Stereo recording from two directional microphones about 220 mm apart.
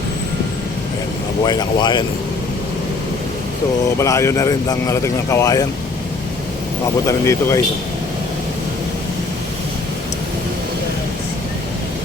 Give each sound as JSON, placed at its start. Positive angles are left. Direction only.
{"t": 1.5, "sound": "speech", "side_deg": 20}
{"t": 3.9, "sound": "speech", "side_deg": 15}
{"t": 7.1, "sound": "speech", "side_deg": 15}